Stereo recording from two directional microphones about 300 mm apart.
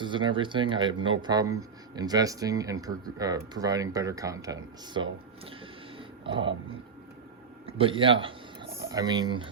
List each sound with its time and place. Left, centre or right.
0.0 s speech: centre
6.0 s a sound: centre
7.7 s speech: centre